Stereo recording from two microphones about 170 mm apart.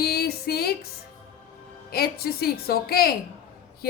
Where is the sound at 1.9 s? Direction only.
65° left (ahead or behind).